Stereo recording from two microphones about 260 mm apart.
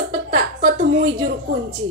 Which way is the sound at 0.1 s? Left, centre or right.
Right.